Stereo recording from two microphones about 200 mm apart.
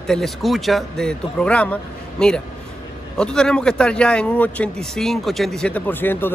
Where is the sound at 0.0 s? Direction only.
Centre (ahead or behind).